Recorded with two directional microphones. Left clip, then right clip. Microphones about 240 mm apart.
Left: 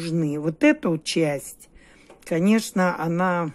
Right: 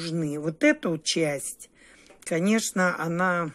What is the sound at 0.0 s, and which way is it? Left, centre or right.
Speech, centre.